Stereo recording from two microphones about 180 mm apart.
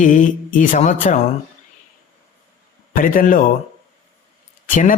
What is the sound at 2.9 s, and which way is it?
Speech, 50° left (ahead or behind).